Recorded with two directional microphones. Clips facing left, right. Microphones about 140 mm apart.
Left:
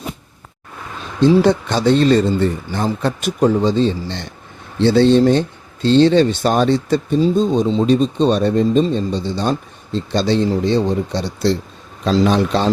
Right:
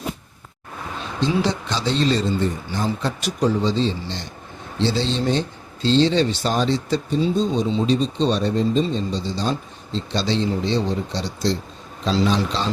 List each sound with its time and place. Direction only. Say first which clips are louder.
1.4 s speech: left 8 dB; 55° left (ahead or behind)